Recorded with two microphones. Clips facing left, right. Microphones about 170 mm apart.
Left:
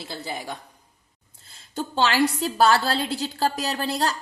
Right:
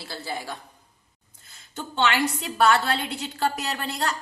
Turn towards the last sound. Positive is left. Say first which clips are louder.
# left 3 dB
turn(degrees=35)  # may be behind; listen again after turning